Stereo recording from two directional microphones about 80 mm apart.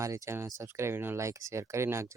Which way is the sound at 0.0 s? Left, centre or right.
Right.